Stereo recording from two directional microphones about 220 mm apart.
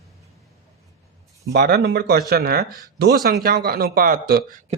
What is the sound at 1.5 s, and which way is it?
Speech, 50° right (ahead or behind).